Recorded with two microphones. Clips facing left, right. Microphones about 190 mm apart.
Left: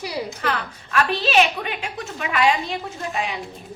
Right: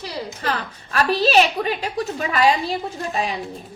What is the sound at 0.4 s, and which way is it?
A woman's voice, 35° right (ahead or behind).